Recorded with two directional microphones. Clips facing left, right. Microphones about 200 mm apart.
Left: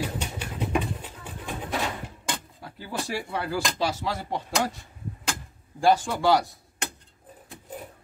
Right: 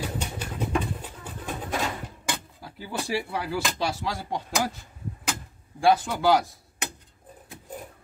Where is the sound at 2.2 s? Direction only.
5° right (ahead or behind).